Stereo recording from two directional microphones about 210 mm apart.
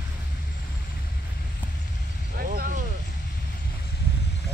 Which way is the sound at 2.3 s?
45° right (ahead or behind).